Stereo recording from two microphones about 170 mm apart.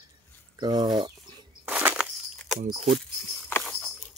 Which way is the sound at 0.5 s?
25° right (ahead or behind).